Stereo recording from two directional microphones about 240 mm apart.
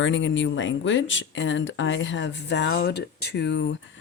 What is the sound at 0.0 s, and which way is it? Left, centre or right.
Speech, left.